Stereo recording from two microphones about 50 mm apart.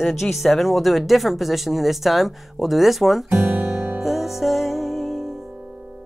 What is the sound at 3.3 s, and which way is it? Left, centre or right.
Guitar, right.